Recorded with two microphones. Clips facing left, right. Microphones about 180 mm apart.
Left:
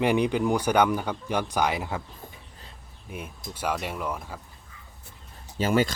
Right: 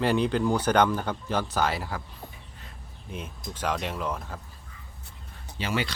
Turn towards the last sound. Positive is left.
turn(degrees=45)  # may be behind; listen again after turning